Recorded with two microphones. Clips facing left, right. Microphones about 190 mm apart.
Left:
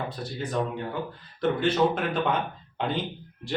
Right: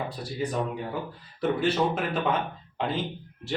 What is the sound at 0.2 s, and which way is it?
Speech, 10° right (ahead or behind).